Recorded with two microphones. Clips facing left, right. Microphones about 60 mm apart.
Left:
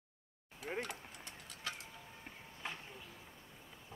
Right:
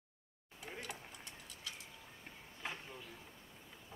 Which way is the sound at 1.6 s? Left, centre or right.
Left.